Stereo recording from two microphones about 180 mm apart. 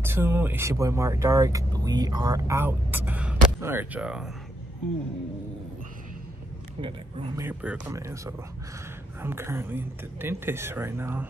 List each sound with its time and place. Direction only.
0.0 s speech: 10° right (ahead or behind)
7.3 s speech: 10° right (ahead or behind)